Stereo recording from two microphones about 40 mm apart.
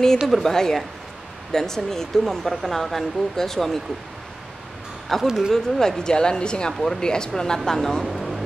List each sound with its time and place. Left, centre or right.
0.3 s speech: centre
5.2 s speech: centre
5.5 s speech: centre
8.0 s a sound: centre